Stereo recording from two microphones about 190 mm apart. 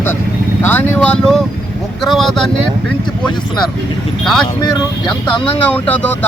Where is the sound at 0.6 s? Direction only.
10° left (ahead or behind).